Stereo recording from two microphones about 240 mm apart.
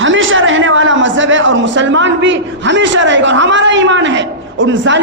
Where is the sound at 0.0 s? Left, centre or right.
Right.